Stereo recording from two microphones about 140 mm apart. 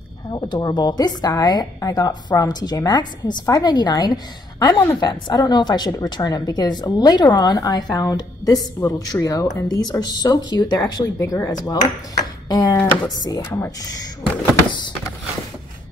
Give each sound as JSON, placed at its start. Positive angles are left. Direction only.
{"t": 0.3, "sound": "a woman's voice", "side_deg": 30}